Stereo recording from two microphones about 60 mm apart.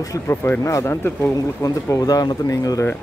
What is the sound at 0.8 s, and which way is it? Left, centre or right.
Speech, left.